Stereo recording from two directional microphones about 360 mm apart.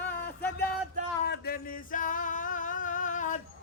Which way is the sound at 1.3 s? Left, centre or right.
Left.